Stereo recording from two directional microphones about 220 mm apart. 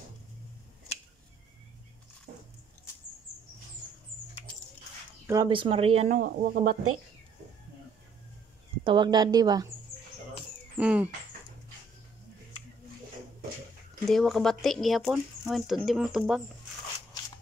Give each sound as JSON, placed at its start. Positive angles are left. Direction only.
{"t": 2.3, "sound": "a sound", "side_deg": -35}
{"t": 5.2, "sound": "speech", "side_deg": -15}
{"t": 8.8, "sound": "a woman's voice", "side_deg": -20}
{"t": 10.8, "sound": "speech", "side_deg": -5}
{"t": 14.0, "sound": "speech", "side_deg": 0}